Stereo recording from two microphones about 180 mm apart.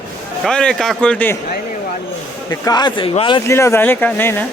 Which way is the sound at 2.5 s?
20° left (ahead or behind).